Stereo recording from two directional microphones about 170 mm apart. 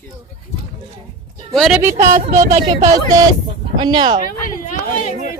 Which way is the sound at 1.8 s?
15° right (ahead or behind).